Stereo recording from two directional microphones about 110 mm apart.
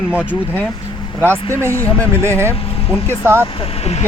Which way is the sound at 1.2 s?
20° right (ahead or behind).